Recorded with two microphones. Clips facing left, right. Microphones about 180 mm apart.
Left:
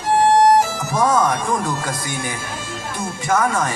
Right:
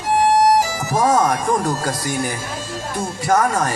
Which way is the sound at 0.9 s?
40° right (ahead or behind).